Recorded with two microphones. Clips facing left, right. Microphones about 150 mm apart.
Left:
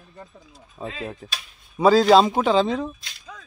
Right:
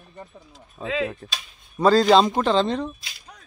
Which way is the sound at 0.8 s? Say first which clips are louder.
Right 6 dB; 90° right.